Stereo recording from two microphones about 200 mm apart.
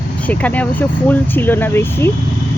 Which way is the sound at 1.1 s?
10° left (ahead or behind).